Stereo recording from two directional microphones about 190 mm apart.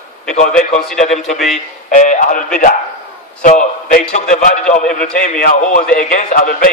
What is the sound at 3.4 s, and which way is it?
A man's voice, 40° left (ahead or behind).